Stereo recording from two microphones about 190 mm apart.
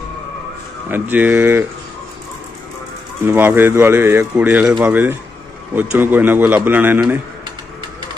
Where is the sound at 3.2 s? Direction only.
10° right (ahead or behind).